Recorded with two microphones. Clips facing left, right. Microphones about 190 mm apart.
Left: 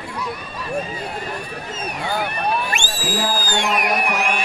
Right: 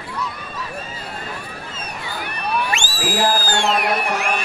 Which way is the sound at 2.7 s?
50° left (ahead or behind).